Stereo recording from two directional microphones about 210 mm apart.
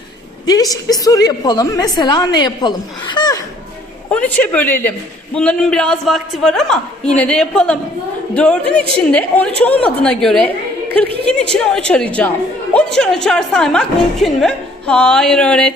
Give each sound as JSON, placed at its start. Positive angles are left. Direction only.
{"t": 0.4, "sound": "a woman's voice", "side_deg": 15}
{"t": 4.1, "sound": "a man's voice", "side_deg": 5}